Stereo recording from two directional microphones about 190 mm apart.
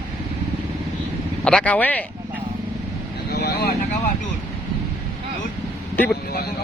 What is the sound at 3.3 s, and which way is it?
Vehicle, 60° left (ahead or behind).